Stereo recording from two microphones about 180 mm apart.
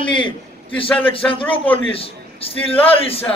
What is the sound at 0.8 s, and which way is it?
Speech, 10° left (ahead or behind).